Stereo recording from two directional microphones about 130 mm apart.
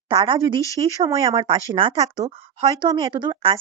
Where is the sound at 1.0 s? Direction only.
25° right (ahead or behind).